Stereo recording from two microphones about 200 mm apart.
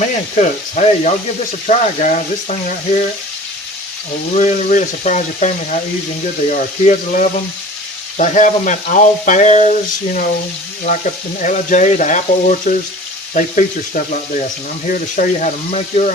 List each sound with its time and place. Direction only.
0.0 s frying: 40° left (ahead or behind)
4.4 s frying: 40° left (ahead or behind)
11.3 s frying: 40° left (ahead or behind)